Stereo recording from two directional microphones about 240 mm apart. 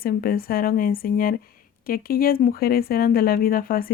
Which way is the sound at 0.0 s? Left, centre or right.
Left.